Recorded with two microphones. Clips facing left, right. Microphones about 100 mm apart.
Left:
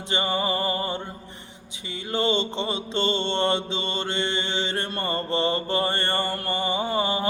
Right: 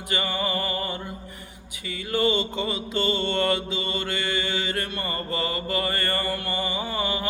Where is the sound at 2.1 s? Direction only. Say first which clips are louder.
Right 1 dB; 25° left (ahead or behind).